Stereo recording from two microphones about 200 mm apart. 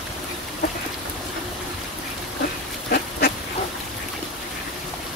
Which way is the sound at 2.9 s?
50° left (ahead or behind).